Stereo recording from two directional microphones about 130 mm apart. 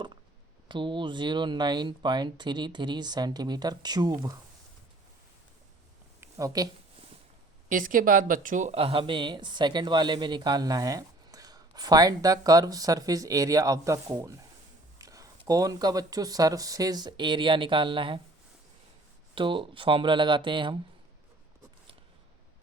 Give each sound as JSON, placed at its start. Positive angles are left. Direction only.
{"t": 0.7, "sound": "speech", "side_deg": -40}
{"t": 6.1, "sound": "a sound", "side_deg": -25}
{"t": 7.7, "sound": "a woman's voice", "side_deg": -90}
{"t": 8.7, "sound": "speech", "side_deg": -45}
{"t": 19.3, "sound": "speech", "side_deg": -40}